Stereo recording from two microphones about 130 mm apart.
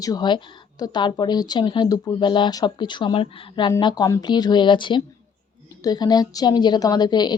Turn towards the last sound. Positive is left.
turn(degrees=35)  # may be behind; listen again after turning